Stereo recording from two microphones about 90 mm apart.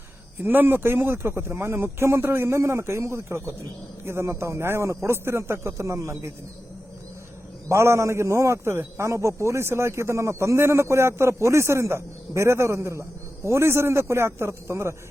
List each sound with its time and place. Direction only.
0.4 s a man's voice: 25° right (ahead or behind)
7.7 s a man's voice: 30° right (ahead or behind)